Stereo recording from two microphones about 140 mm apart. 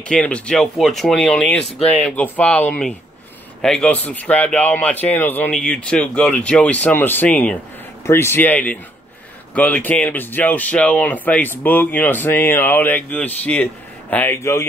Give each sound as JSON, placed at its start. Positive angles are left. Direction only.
{"t": 0.1, "sound": "speech", "side_deg": 5}